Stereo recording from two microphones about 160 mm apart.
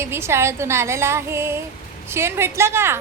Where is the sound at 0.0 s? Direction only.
15° right (ahead or behind).